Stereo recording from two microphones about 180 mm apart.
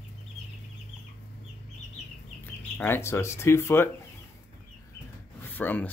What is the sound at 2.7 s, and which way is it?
Speech, 15° left (ahead or behind).